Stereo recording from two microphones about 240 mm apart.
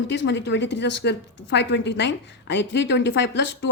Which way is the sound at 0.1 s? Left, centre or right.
Left.